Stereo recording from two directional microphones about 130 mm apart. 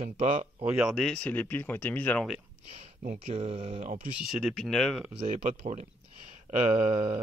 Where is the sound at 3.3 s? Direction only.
50° right (ahead or behind).